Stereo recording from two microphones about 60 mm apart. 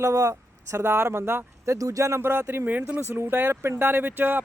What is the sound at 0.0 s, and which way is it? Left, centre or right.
Speech, right.